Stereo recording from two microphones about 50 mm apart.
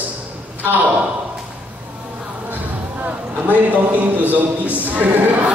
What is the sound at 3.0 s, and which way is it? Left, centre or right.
A man's voice, right.